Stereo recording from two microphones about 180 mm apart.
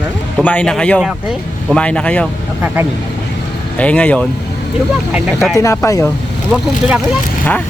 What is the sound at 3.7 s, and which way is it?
Speech, 5° left (ahead or behind).